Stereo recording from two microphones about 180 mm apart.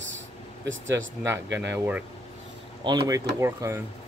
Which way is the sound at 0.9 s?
15° right (ahead or behind).